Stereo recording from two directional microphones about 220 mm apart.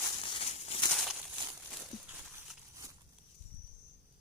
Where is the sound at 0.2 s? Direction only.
25° left (ahead or behind).